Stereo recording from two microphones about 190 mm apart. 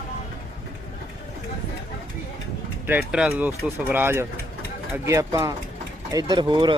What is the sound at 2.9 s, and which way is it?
Speech, 10° right (ahead or behind).